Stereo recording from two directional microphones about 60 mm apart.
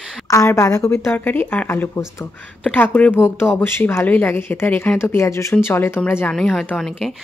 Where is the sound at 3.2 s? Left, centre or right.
Left.